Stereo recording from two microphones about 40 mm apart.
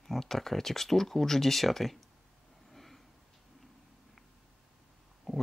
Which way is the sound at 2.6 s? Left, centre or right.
Centre.